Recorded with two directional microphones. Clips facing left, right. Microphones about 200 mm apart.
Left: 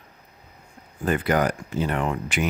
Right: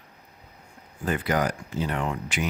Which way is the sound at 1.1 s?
55° left (ahead or behind).